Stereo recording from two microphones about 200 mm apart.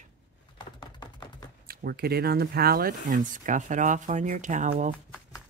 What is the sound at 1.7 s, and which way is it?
Speech, 50° right (ahead or behind).